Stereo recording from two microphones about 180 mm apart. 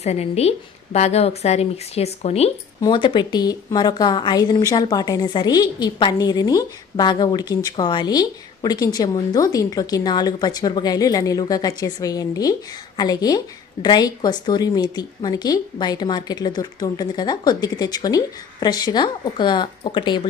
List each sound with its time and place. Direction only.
0.0 s a woman's voice: 35° left (ahead or behind)